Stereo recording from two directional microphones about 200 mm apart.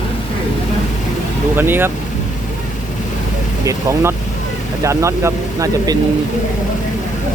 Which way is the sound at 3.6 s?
15° right (ahead or behind).